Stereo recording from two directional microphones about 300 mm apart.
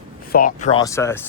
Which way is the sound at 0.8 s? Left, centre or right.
Centre.